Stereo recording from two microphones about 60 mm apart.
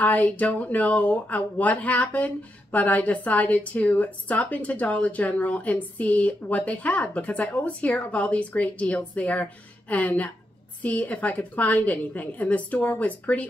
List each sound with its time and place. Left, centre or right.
0.0 s speech: left